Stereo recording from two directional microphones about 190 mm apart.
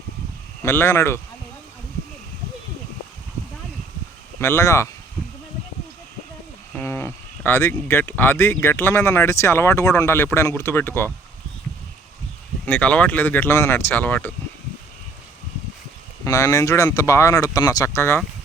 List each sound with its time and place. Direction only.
0.6 s speech: 15° left (ahead or behind)
4.4 s speech: 15° left (ahead or behind)
6.7 s speech: 10° left (ahead or behind)
12.6 s speech: 10° left (ahead or behind)
16.2 s speech: 15° left (ahead or behind)